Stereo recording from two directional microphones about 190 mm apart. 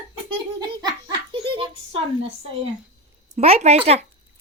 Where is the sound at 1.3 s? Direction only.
30° right (ahead or behind).